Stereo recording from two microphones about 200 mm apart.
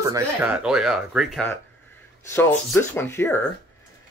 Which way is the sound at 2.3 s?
10° left (ahead or behind).